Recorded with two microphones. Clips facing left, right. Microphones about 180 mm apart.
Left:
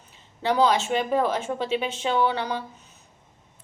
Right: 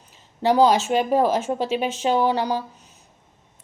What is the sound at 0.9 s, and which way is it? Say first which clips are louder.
Speech: right 4 dB; 40° right (ahead or behind).